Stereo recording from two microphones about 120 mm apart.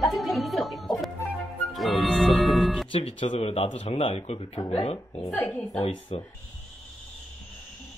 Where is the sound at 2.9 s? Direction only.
45° left (ahead or behind).